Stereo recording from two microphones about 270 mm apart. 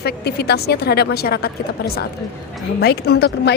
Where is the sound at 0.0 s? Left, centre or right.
Left.